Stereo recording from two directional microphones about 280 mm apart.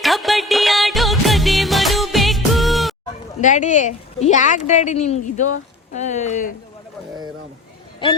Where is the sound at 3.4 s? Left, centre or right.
Left.